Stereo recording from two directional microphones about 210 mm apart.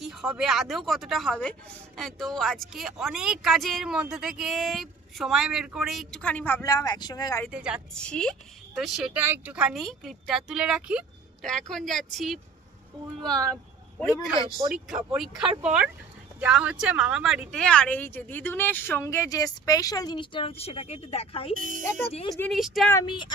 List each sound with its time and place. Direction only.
0.0 s a woman's voice: centre (ahead or behind); by 7.4 s 20° left (ahead or behind)
7.4 s a woman's voice: 5° right (ahead or behind)
14.7 s a woman's voice: centre (ahead or behind); by 21.5 s 25° left (ahead or behind)
21.5 s speech: 40° right (ahead or behind)
22.3 s a woman's voice: centre (ahead or behind)
22.9 s speech: 20° left (ahead or behind)